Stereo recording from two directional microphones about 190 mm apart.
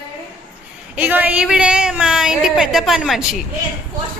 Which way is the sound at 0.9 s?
10° right (ahead or behind).